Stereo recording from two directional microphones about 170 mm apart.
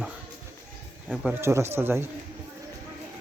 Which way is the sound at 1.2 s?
15° right (ahead or behind).